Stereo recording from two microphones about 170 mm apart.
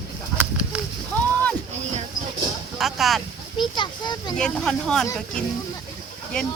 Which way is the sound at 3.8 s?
25° left (ahead or behind).